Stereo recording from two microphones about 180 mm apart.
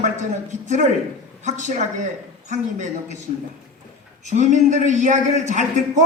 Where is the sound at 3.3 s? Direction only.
45° left (ahead or behind).